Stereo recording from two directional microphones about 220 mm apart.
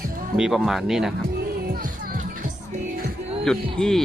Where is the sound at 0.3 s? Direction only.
Centre (ahead or behind).